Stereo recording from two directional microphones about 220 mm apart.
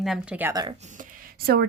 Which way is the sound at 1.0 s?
45° right (ahead or behind).